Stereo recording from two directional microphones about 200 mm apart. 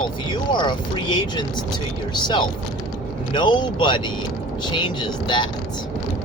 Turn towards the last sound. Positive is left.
turn(degrees=20)  # may be behind; listen again after turning